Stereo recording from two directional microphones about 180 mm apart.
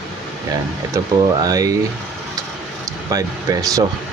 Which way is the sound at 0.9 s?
20° right (ahead or behind).